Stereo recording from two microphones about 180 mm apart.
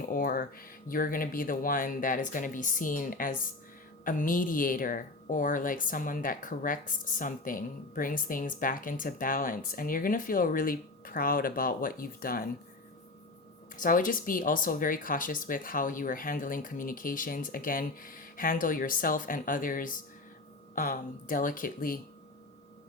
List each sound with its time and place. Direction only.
0.1 s speech: 50° left (ahead or behind)
13.7 s speech: 50° left (ahead or behind)